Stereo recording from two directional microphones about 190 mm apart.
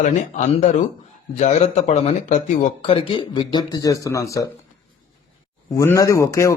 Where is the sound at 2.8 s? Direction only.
30° left (ahead or behind).